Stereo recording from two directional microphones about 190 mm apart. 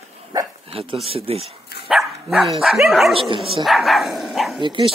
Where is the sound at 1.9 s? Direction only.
Centre (ahead or behind).